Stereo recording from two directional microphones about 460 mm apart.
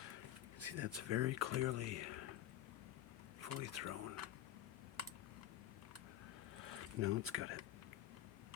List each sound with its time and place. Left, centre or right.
0.6 s speech: right
3.4 s speech: right
6.7 s speech: right